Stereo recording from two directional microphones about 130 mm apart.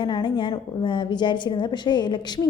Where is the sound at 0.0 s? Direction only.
35° left (ahead or behind).